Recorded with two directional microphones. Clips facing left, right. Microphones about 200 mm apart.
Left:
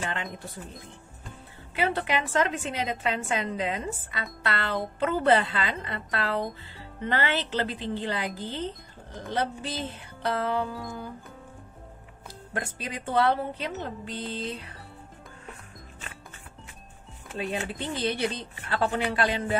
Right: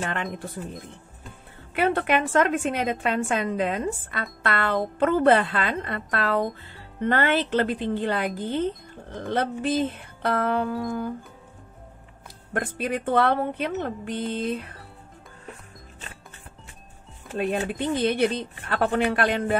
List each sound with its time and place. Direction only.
0.0 s speech: 55° right (ahead or behind)
1.8 s a woman's voice: 55° right (ahead or behind)
12.5 s a woman's voice: 55° right (ahead or behind)
17.4 s speech: 55° right (ahead or behind)